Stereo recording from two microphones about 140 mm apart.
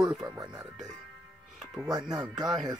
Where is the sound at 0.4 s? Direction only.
25° right (ahead or behind).